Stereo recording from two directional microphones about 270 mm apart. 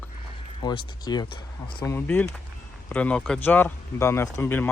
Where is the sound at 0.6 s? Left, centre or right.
Centre.